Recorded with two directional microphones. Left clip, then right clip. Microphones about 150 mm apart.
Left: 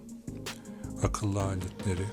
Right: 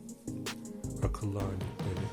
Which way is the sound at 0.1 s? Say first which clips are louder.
Right 1 dB; centre (ahead or behind).